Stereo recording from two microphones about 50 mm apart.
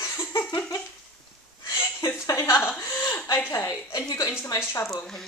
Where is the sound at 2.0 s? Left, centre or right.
Left.